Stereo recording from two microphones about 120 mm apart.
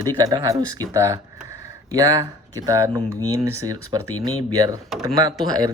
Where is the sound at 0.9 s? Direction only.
25° right (ahead or behind).